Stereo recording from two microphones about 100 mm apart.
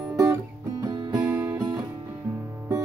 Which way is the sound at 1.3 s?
25° right (ahead or behind).